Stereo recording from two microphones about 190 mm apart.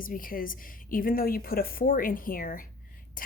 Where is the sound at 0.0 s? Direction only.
45° left (ahead or behind).